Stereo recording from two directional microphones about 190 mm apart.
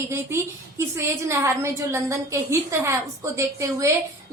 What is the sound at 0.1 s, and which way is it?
A woman's voice, 15° right (ahead or behind).